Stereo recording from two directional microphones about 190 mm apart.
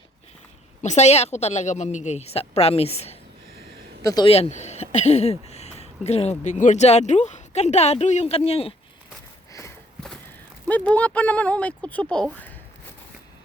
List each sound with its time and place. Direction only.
0.8 s speech: 35° left (ahead or behind)
4.0 s speech: 20° left (ahead or behind)
4.3 s speech: 35° left (ahead or behind)
9.5 s a sound: 15° left (ahead or behind)
10.7 s speech: 10° left (ahead or behind)